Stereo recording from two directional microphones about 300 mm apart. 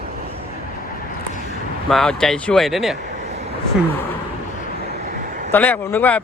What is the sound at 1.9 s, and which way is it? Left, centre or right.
Speech, centre.